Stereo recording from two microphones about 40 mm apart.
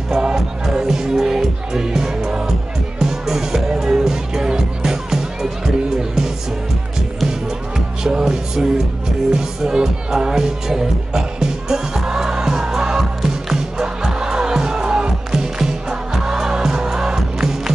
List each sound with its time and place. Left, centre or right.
0.2 s music: right
0.8 s music: centre